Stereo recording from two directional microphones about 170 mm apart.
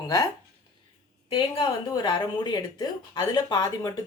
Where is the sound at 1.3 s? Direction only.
30° left (ahead or behind).